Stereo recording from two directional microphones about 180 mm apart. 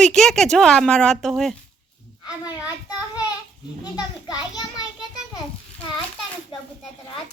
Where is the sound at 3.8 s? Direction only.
20° left (ahead or behind).